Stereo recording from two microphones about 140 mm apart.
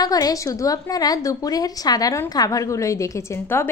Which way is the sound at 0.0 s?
25° left (ahead or behind).